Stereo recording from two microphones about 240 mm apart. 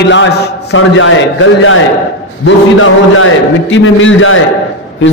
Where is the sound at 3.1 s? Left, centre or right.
Left.